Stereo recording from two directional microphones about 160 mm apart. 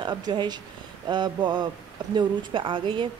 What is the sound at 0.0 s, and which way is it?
Speech, 25° right (ahead or behind).